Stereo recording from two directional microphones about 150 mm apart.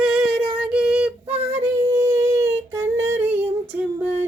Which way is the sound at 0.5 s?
5° right (ahead or behind).